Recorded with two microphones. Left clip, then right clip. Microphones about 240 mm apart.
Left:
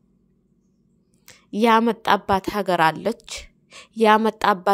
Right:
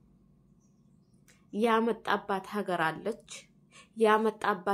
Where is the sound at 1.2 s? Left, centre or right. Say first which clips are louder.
Left 10 dB; left.